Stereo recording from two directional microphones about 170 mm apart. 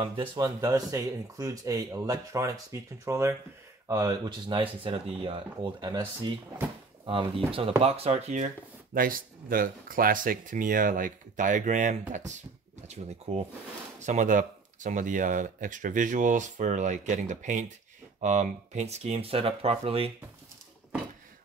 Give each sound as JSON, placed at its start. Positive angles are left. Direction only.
{"t": 0.0, "sound": "speech", "side_deg": -30}
{"t": 8.9, "sound": "speech", "side_deg": -55}